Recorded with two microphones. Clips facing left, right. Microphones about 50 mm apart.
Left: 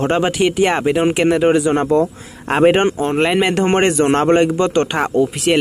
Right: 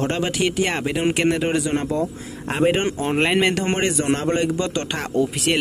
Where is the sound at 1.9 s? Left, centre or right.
Left.